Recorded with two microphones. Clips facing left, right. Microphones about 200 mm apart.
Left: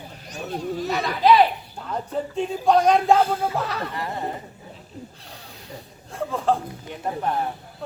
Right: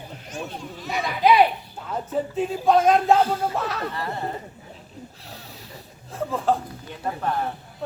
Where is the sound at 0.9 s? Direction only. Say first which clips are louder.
Left 1 dB; 15° right (ahead or behind).